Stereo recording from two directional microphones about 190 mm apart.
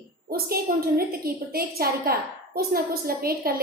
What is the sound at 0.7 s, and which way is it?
A woman's voice, 50° right (ahead or behind).